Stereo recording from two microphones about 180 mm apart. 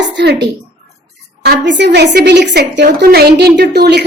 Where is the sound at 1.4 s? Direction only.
70° right (ahead or behind).